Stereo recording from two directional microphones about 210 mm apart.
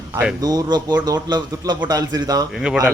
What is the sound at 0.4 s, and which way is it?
A man's voice, 20° right (ahead or behind).